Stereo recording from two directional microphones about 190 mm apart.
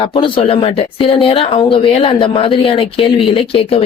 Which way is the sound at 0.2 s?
30° left (ahead or behind).